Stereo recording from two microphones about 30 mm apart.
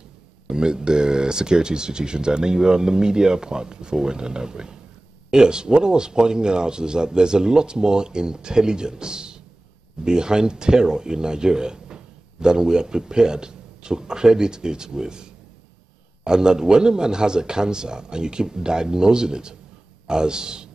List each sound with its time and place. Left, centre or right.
0.5 s a man's voice: right